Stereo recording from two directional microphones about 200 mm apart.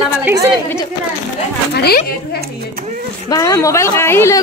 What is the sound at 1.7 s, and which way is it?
Speech, 55° left (ahead or behind).